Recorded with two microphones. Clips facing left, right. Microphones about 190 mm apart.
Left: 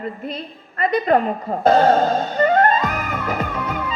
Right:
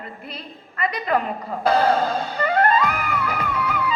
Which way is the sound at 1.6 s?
45° left (ahead or behind).